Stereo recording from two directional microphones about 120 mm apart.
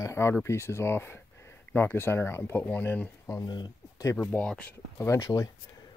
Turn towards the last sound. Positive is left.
turn(degrees=30)  # may be behind; listen again after turning